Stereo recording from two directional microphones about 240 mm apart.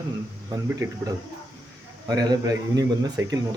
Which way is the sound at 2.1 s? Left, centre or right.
Centre.